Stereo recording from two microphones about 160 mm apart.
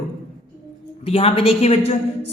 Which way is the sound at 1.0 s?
40° left (ahead or behind).